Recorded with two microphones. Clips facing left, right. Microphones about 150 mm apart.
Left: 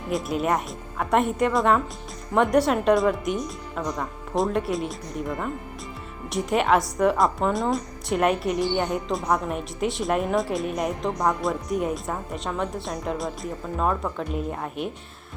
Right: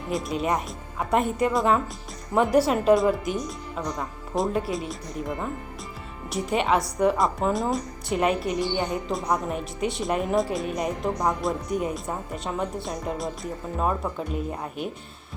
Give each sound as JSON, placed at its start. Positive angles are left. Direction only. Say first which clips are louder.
{"t": 0.1, "sound": "speech", "louder": "left 2 dB", "side_deg": 0}
{"t": 6.2, "sound": "speech", "louder": "left 2 dB", "side_deg": 0}